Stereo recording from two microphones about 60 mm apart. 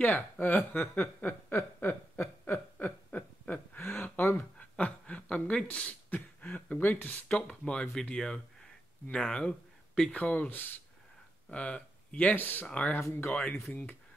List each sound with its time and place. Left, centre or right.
0.0 s speech: left
1.5 s a sound: left
7.2 s speech: centre
10.5 s speech: left
11.4 s speech: centre
12.4 s speech: left
12.6 s speech: left
13.1 s speech: left